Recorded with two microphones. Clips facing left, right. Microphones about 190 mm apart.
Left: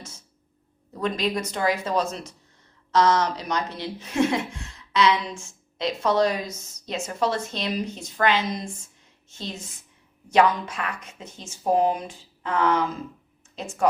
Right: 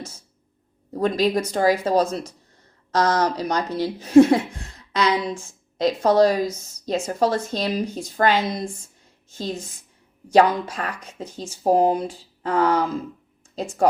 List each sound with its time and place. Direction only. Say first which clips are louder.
0.9 s a woman's voice: right 6 dB; 35° right (ahead or behind)